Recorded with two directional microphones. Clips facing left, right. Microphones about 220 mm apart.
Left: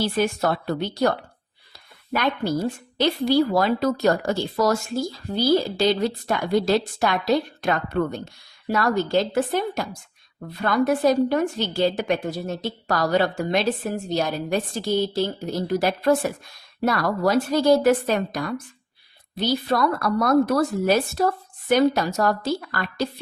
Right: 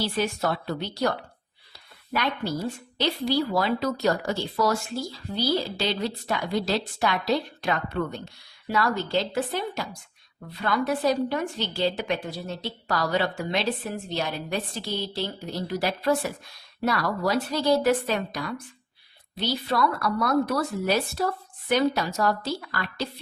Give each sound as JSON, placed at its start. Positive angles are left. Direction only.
{"t": 0.0, "sound": "a woman's voice", "side_deg": 50}
{"t": 2.1, "sound": "a woman's voice", "side_deg": 50}